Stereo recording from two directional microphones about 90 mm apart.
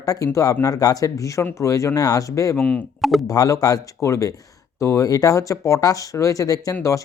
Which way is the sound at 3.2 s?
40° left (ahead or behind).